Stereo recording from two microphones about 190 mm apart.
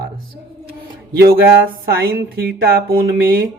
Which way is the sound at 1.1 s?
55° right (ahead or behind).